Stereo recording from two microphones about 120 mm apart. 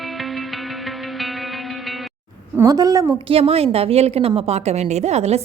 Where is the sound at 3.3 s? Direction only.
55° right (ahead or behind).